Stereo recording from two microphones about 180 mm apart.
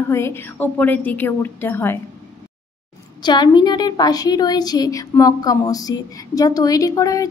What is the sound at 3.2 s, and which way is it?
A woman's voice, 25° left (ahead or behind).